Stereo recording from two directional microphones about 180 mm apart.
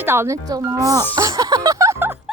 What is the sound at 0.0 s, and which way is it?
Speech, 15° right (ahead or behind).